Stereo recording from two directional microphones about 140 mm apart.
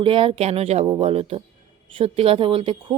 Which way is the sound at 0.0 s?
40° right (ahead or behind).